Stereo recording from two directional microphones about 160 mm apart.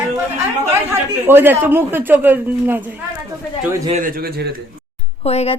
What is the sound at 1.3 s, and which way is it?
Speech, 15° right (ahead or behind).